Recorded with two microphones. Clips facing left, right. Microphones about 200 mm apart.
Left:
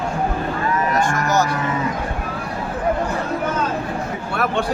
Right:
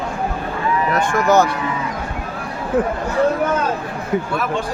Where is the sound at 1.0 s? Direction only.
55° right (ahead or behind).